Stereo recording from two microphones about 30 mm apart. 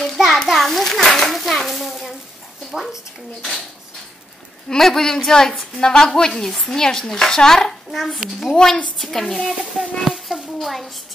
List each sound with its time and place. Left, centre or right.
0.0 s a sound: centre
0.5 s children playing: centre
1.7 s frying: centre
4.7 s a woman's voice: centre; by 8.8 s left
9.0 s a child's voice: centre